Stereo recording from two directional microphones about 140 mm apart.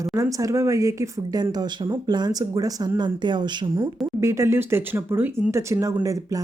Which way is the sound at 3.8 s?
20° right (ahead or behind).